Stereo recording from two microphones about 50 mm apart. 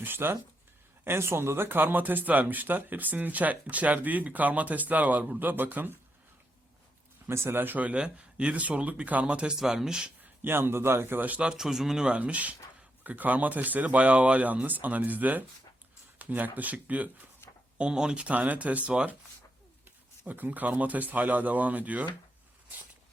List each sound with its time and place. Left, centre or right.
0.0 s a man's voice: right
1.0 s speech: right
7.3 s speech: right
7.6 s speech: right
9.6 s speech: centre
10.4 s a man's voice: right
11.2 s speech: right
11.4 s speech: centre
12.0 s speech: right
17.7 s speech: centre
18.3 s speech: right
20.2 s speech: right